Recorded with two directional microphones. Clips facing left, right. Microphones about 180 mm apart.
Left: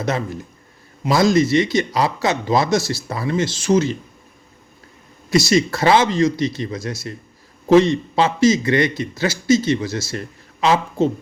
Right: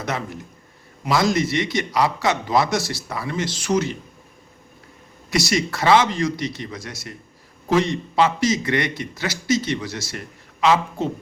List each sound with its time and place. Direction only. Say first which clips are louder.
1.1 s a man's voice: left 5 dB; 25° left (ahead or behind)
5.3 s a man's voice: left 6 dB; 25° left (ahead or behind)